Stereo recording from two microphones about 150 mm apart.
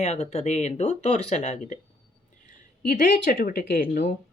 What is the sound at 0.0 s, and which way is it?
Speech, 50° left (ahead or behind).